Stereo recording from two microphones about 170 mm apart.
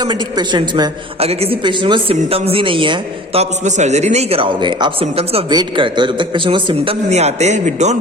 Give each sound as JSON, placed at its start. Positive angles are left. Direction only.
{"t": 0.0, "sound": "a woman's voice", "side_deg": -25}
{"t": 3.6, "sound": "a man's voice", "side_deg": -45}